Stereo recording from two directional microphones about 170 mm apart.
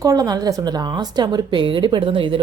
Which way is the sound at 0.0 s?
20° right (ahead or behind).